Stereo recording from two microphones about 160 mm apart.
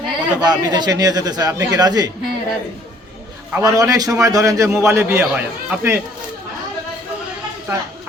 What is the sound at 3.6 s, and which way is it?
A man's voice, 20° right (ahead or behind).